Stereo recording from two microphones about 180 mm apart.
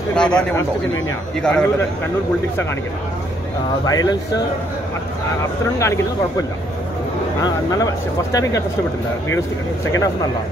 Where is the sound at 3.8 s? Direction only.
20° left (ahead or behind).